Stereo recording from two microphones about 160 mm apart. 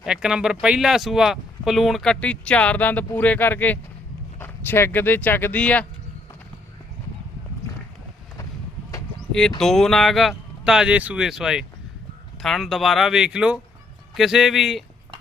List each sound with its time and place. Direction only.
0.0 s speech: 5° right (ahead or behind)
9.6 s speech: centre (ahead or behind)